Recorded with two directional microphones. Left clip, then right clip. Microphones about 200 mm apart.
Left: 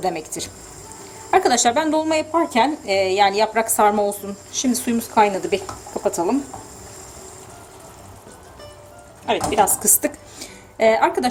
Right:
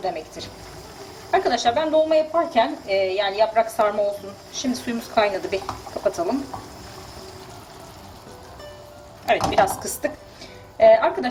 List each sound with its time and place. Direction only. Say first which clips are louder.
0.0 s a woman's voice: left 3 dB; 50° left (ahead or behind); by 6.3 s 35° left (ahead or behind)
9.2 s a woman's voice: even; 40° left (ahead or behind)